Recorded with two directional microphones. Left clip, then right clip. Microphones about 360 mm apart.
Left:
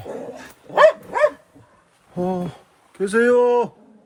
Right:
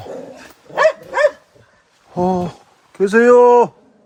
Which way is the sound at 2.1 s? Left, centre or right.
Centre.